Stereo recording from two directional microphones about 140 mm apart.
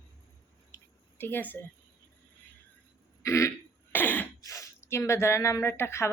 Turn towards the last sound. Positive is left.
turn(degrees=20)  # may be behind; listen again after turning